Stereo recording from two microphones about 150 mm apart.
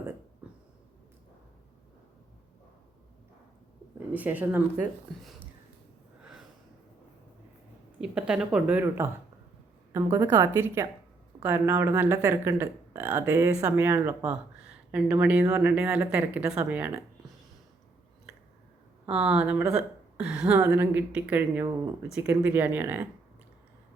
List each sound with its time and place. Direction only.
0.4 s a sound: 10° right (ahead or behind)
4.1 s speech: 10° right (ahead or behind)
8.1 s speech: 5° right (ahead or behind)
19.0 s speech: 10° right (ahead or behind)